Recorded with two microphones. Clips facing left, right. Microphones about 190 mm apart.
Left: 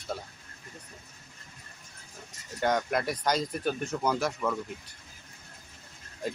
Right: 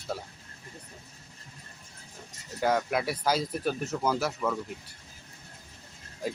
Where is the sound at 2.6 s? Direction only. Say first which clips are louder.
Right 1 dB; 5° right (ahead or behind).